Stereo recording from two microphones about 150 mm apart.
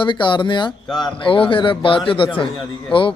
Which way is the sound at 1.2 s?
35° left (ahead or behind).